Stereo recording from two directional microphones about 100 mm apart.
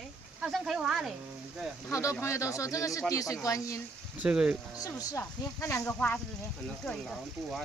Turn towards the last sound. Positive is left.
turn(degrees=5)  # may be behind; listen again after turning